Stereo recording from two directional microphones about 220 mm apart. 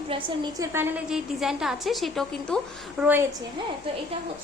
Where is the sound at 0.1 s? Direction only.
15° right (ahead or behind).